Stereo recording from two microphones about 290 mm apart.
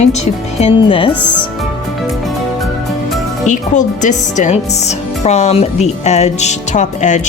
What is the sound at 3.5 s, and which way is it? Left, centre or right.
Speech, left.